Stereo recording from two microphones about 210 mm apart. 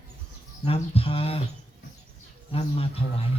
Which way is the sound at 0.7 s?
25° left (ahead or behind).